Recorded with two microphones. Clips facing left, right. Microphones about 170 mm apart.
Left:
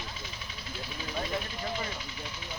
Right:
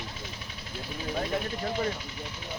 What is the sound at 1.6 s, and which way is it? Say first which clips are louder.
Vehicle: right 5 dB; 60° right (ahead or behind).